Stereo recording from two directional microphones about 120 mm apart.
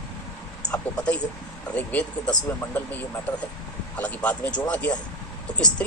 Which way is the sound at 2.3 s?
25° left (ahead or behind).